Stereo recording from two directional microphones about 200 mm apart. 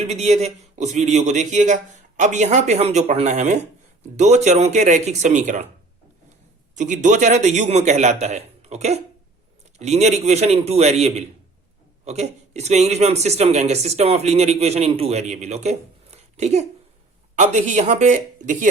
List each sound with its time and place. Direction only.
0.0 s speech: 35° right (ahead or behind)
6.7 s speech: 40° right (ahead or behind)
16.1 s a sound: 35° right (ahead or behind)
17.3 s speech: 35° right (ahead or behind)